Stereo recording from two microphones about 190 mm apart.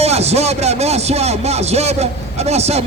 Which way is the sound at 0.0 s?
35° right (ahead or behind).